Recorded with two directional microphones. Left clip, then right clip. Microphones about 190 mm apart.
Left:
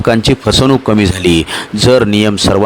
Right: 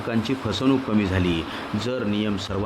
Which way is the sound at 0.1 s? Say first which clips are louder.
Left 16 dB; 60° left (ahead or behind).